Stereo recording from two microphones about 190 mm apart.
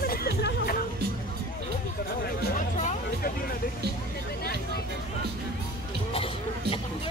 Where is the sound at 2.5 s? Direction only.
40° left (ahead or behind).